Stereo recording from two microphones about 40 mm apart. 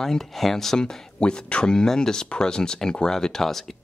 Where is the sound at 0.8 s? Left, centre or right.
Left.